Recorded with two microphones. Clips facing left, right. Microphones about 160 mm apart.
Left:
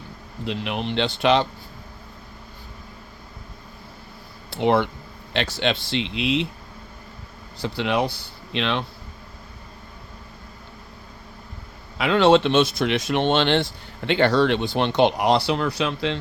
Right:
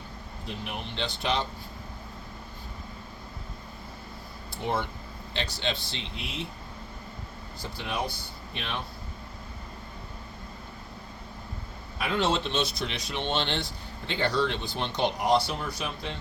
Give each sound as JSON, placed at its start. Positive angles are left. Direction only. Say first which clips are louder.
{"t": 0.4, "sound": "speech", "louder": "left 10 dB", "side_deg": 90}
{"t": 4.5, "sound": "speech", "louder": "left 11 dB", "side_deg": 80}
{"t": 7.6, "sound": "speech", "louder": "left 10 dB", "side_deg": 85}
{"t": 11.9, "sound": "speech", "louder": "left 11 dB", "side_deg": 90}